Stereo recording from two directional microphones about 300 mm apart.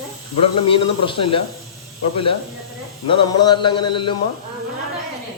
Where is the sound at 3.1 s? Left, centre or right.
Centre.